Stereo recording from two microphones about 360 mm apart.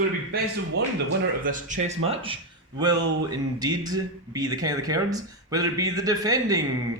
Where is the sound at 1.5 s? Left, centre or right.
Right.